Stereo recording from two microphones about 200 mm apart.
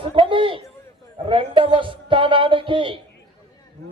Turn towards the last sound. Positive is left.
turn(degrees=-25)  # may be behind; listen again after turning